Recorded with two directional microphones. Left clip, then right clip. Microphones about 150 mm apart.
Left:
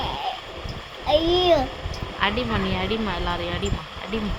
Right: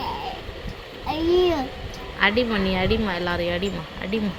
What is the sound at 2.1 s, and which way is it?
Speech, 30° right (ahead or behind).